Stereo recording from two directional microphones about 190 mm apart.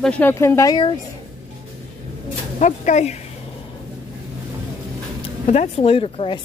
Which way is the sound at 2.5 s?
40° left (ahead or behind).